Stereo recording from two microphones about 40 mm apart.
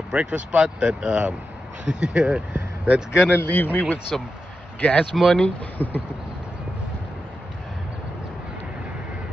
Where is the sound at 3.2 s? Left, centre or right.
Left.